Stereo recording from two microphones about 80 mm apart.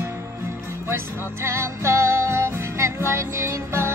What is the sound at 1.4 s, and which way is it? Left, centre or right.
Music, right.